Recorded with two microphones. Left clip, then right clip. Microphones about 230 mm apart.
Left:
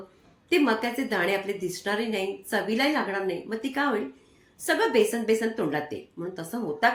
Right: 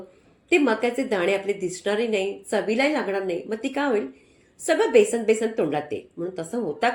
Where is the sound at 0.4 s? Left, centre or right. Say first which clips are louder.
Right 3 dB; centre.